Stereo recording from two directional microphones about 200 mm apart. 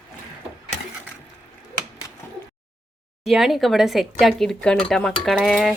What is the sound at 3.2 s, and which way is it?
Speech, centre (ahead or behind).